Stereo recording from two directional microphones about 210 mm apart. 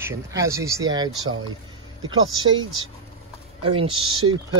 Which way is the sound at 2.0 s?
70° right (ahead or behind).